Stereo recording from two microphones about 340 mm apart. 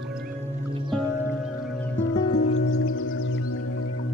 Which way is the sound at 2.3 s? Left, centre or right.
Left.